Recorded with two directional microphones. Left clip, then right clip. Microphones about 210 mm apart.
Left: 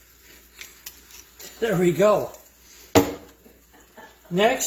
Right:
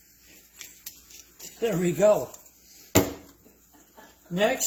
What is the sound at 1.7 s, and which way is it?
Speech, 15° left (ahead or behind).